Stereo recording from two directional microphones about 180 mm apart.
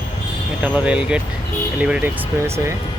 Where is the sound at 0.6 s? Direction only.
5° right (ahead or behind).